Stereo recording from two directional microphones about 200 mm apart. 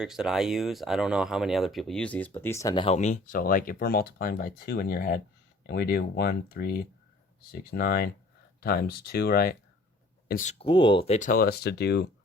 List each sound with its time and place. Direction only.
0.0 s speech: centre (ahead or behind); by 6.7 s 50° left (ahead or behind)
7.7 s speech: 50° left (ahead or behind)
10.6 s speech: 25° left (ahead or behind); by 12.1 s 55° left (ahead or behind)